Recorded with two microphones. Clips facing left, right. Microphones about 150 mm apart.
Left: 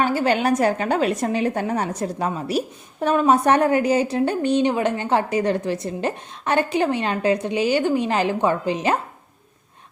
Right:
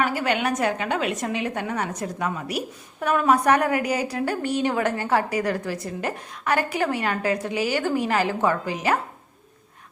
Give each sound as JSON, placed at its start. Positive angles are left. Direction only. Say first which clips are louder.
{"t": 0.0, "sound": "a woman's voice", "louder": "left 4 dB", "side_deg": 30}